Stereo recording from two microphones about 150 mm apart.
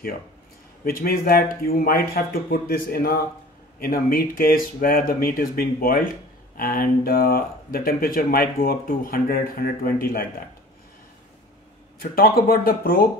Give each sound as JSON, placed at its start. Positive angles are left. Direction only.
{"t": 0.8, "sound": "speech", "side_deg": 85}
{"t": 12.0, "sound": "speech", "side_deg": 80}